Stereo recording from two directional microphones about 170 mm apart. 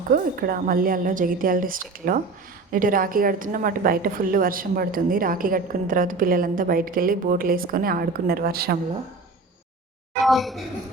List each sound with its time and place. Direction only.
0.1 s a woman's voice: 60° right (ahead or behind)
10.2 s a woman's voice: centre (ahead or behind)